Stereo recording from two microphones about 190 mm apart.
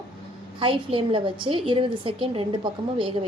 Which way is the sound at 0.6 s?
30° right (ahead or behind).